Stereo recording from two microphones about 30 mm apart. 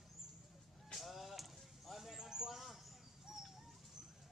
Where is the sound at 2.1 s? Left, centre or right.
Centre.